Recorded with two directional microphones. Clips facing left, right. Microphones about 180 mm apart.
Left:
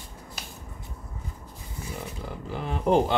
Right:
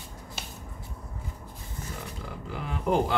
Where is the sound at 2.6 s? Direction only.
30° left (ahead or behind).